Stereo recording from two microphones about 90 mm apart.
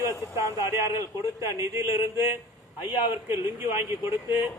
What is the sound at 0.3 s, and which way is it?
A man's voice, 35° right (ahead or behind).